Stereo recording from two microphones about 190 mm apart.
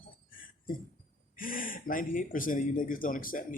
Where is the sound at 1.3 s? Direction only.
45° left (ahead or behind).